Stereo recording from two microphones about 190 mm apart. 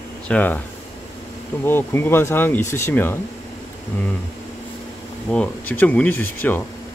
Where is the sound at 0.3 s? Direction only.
10° left (ahead or behind).